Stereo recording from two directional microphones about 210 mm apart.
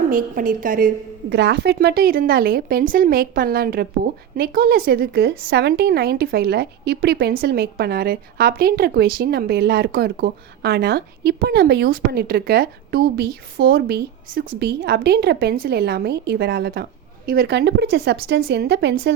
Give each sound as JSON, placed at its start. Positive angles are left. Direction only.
{"t": 0.1, "sound": "a woman's voice", "side_deg": -40}
{"t": 1.3, "sound": "a woman's voice", "side_deg": -55}